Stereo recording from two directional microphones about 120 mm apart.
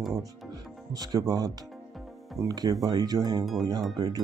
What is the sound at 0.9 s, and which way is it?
Speech, 30° right (ahead or behind).